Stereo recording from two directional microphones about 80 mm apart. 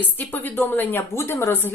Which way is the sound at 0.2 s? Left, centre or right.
Left.